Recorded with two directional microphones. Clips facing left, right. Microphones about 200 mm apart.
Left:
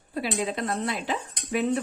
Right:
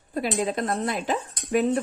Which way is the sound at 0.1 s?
45° right (ahead or behind).